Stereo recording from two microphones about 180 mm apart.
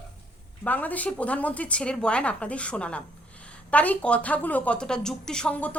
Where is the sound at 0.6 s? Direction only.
10° left (ahead or behind).